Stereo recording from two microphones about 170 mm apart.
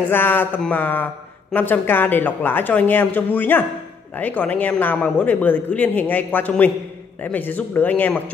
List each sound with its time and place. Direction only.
0.1 s speech: 10° left (ahead or behind)